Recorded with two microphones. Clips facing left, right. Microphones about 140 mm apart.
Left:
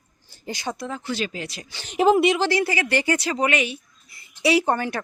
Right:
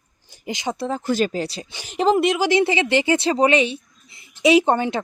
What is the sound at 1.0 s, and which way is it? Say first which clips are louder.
Speech: right 7 dB; 45° right (ahead or behind).